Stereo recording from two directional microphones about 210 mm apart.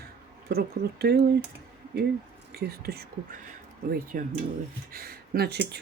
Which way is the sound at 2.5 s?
50° right (ahead or behind).